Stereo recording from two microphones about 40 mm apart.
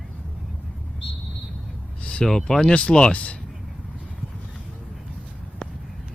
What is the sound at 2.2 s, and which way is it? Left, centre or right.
Speech, centre.